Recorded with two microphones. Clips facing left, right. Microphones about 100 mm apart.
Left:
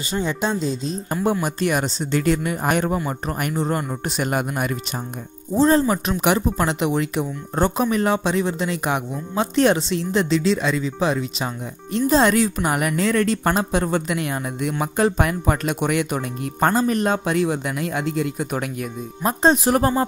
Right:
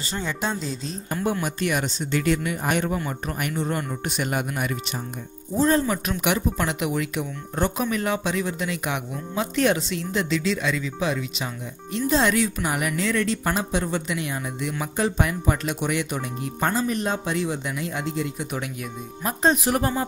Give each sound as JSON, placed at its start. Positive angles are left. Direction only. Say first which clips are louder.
{"t": 0.0, "sound": "speech", "louder": "left 5 dB", "side_deg": 15}
{"t": 1.4, "sound": "speech", "louder": "left 4 dB", "side_deg": 35}
{"t": 5.5, "sound": "speech", "louder": "left 4 dB", "side_deg": 30}
{"t": 19.2, "sound": "speech", "louder": "left 4 dB", "side_deg": 30}